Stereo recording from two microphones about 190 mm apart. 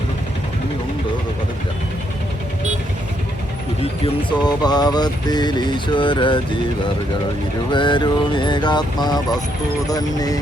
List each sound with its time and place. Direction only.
4.0 s music: 25° left (ahead or behind)
7.7 s music: 25° left (ahead or behind)